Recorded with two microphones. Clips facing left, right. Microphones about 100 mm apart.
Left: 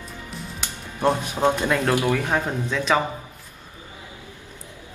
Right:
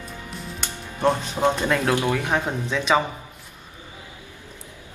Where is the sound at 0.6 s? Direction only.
10° left (ahead or behind).